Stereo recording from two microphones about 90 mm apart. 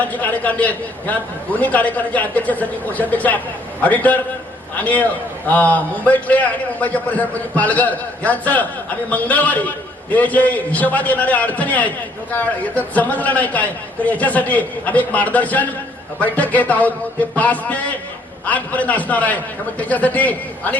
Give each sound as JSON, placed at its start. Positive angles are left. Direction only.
{"t": 0.0, "sound": "a man's voice", "side_deg": 20}